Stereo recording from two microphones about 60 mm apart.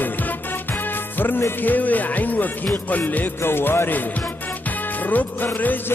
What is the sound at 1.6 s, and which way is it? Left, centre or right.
Music, left.